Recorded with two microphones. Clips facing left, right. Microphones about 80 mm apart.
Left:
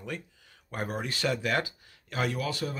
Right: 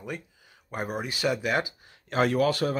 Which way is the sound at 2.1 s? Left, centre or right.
Right.